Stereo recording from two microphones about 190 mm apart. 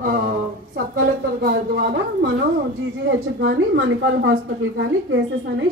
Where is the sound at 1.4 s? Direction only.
60° right (ahead or behind).